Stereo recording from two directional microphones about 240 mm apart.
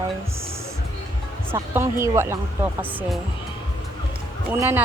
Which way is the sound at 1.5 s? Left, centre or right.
Centre.